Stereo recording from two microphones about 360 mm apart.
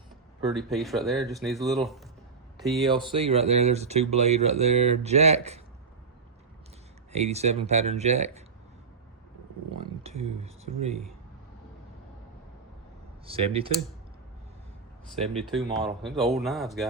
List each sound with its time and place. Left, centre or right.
0.5 s speech: centre
2.8 s speech: centre
7.1 s speech: centre
10.0 s a sound: centre
10.4 s speech: centre
13.2 s speech: centre
15.4 s speech: centre